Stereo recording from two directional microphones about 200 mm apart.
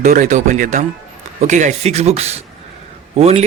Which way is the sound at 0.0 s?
40° right (ahead or behind).